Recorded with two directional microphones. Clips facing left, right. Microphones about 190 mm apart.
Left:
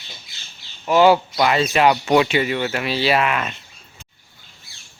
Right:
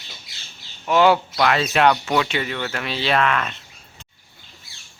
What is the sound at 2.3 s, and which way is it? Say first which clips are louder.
Speech: left 5 dB; 10° left (ahead or behind).